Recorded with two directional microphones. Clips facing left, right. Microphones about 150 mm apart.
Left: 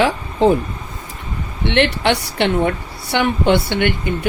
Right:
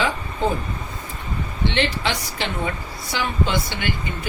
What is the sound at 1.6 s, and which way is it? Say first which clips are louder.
A woman's voice: left 7 dB; 70° left (ahead or behind).